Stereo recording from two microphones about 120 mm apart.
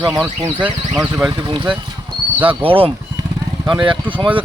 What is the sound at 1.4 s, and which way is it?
Speech, 40° right (ahead or behind).